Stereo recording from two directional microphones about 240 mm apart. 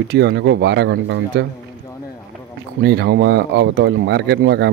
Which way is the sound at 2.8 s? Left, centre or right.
Right.